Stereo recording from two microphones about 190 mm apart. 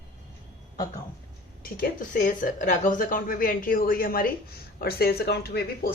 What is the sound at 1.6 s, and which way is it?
Speech, 50° left (ahead or behind).